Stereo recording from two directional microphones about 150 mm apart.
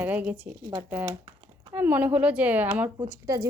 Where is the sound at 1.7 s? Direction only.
10° right (ahead or behind).